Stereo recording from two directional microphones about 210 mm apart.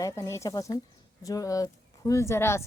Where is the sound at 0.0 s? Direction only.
15° left (ahead or behind).